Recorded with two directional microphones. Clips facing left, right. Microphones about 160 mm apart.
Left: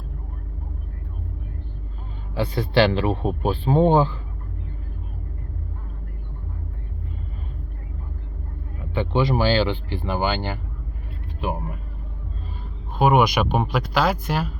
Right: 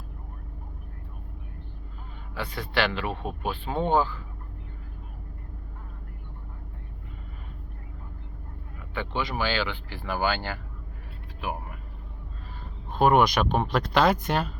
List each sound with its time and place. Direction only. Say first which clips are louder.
2.3 s speech: left 8 dB; 25° left (ahead or behind)
8.8 s speech: left 9 dB; 30° left (ahead or behind)
11.3 s vehicle: left 6 dB; 25° left (ahead or behind)
12.9 s speech: left 2 dB; 5° left (ahead or behind)